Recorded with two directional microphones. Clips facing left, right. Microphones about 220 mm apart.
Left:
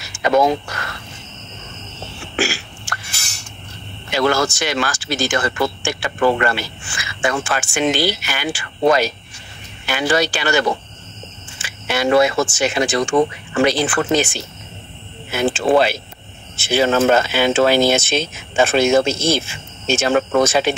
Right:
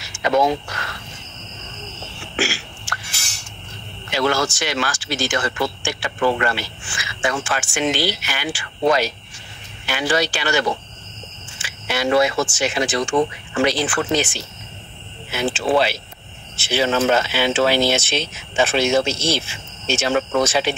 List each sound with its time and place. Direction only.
0.2 s speech: 50° left (ahead or behind)
2.3 s a sound: 50° left (ahead or behind)
4.1 s speech: 50° left (ahead or behind)